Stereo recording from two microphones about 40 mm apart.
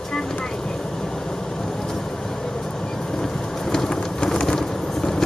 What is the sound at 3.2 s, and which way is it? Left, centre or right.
Vehicle, centre.